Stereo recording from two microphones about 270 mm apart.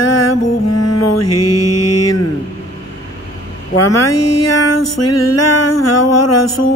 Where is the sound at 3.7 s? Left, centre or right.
Left.